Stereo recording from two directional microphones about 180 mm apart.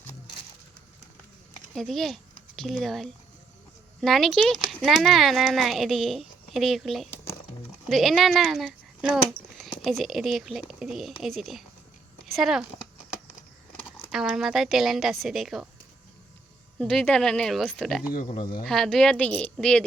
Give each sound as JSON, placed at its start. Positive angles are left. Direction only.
{"t": 1.7, "sound": "speech", "side_deg": 0}
{"t": 14.1, "sound": "speech", "side_deg": 0}
{"t": 16.7, "sound": "speech", "side_deg": 5}
{"t": 18.1, "sound": "speech", "side_deg": 45}
{"t": 18.6, "sound": "speech", "side_deg": 5}